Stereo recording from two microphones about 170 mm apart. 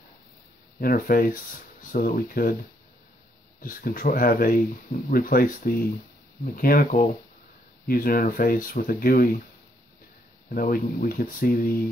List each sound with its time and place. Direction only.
0.7 s speech: 60° left (ahead or behind)
3.6 s speech: 55° left (ahead or behind)
10.5 s speech: 60° left (ahead or behind)